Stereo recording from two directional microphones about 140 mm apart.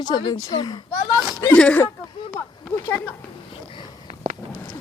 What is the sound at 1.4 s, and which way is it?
Speech, 10° left (ahead or behind).